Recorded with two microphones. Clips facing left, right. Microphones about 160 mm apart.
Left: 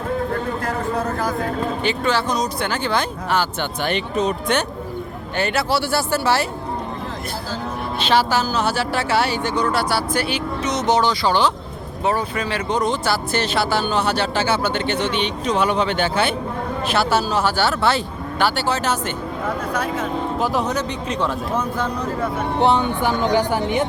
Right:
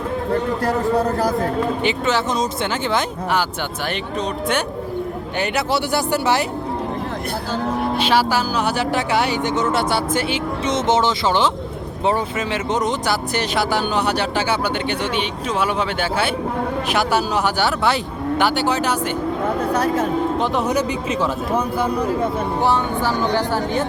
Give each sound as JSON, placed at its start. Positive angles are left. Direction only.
{"t": 0.6, "sound": "speech", "side_deg": -35}
{"t": 1.8, "sound": "speech", "side_deg": -20}
{"t": 3.8, "sound": "speech", "side_deg": 0}
{"t": 5.4, "sound": "speech", "side_deg": -15}
{"t": 7.9, "sound": "speech", "side_deg": -10}
{"t": 19.7, "sound": "speech", "side_deg": -35}
{"t": 20.4, "sound": "speech", "side_deg": 0}
{"t": 22.6, "sound": "speech", "side_deg": 20}